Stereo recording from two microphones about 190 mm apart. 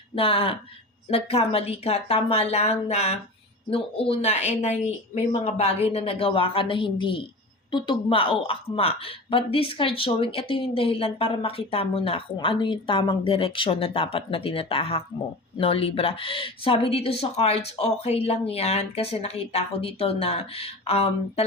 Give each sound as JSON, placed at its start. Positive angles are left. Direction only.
{"t": 0.2, "sound": "a woman's voice", "side_deg": 30}